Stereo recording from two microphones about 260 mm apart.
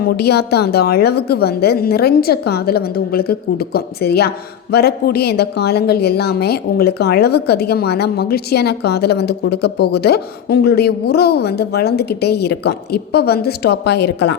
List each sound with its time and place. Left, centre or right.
0.0 s speech: left